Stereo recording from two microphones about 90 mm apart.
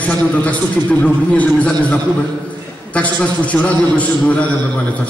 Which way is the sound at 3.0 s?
15° left (ahead or behind).